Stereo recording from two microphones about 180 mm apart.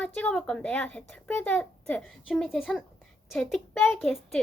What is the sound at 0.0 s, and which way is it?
A child's voice, 5° left (ahead or behind).